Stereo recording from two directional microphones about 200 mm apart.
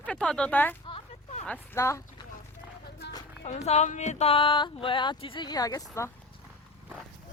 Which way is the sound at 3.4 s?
35° left (ahead or behind).